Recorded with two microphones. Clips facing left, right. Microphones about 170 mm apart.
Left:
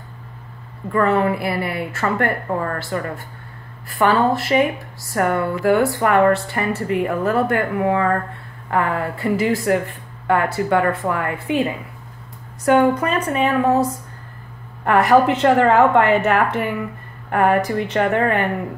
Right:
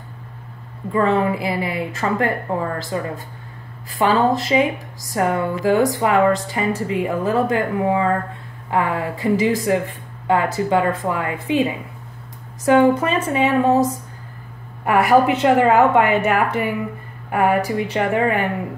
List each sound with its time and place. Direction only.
0.9 s a woman's voice: 15° right (ahead or behind)
13.0 s speech: 20° right (ahead or behind)
14.9 s a woman's voice: 10° right (ahead or behind)